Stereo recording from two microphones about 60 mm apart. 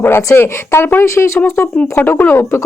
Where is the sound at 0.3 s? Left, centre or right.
Left.